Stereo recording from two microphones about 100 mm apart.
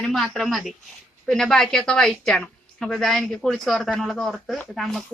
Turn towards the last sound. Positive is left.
turn(degrees=0)  # may be behind; listen again after turning